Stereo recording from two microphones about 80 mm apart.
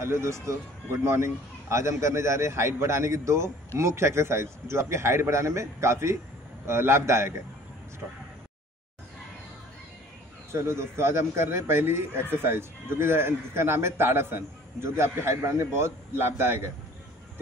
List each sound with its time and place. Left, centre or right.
0.0 s a man's voice: right
10.5 s a man's voice: right